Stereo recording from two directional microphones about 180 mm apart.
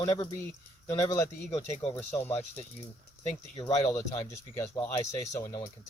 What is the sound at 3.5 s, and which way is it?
Speech, 30° left (ahead or behind).